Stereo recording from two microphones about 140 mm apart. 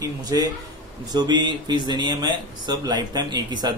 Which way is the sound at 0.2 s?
25° right (ahead or behind).